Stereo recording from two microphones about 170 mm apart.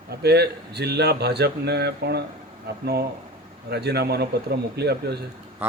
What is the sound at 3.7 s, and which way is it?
Speech, 75° right (ahead or behind).